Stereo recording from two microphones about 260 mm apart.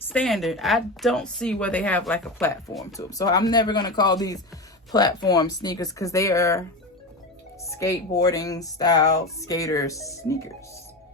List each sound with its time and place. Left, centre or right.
0.1 s speech: centre
7.7 s speech: centre